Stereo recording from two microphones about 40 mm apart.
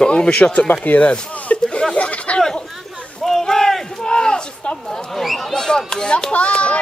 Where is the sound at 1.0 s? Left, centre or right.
Left.